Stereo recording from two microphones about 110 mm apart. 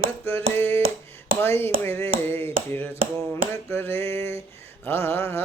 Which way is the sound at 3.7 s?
20° left (ahead or behind).